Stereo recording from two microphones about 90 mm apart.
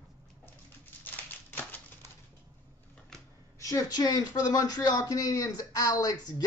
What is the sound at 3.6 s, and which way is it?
Speech, 40° left (ahead or behind).